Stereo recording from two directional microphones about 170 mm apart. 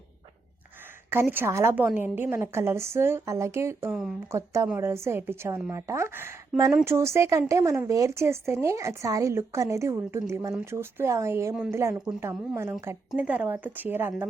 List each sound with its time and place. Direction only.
1.1 s speech: 15° right (ahead or behind)